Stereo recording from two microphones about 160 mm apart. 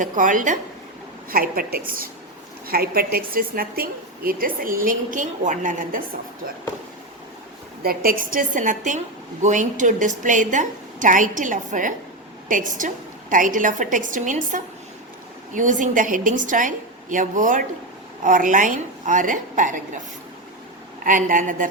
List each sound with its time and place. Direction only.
0.0 s a woman's voice: 55° right (ahead or behind)
1.3 s a woman's voice: 65° right (ahead or behind)
7.8 s a woman's voice: 65° right (ahead or behind)
21.0 s a woman's voice: 55° right (ahead or behind)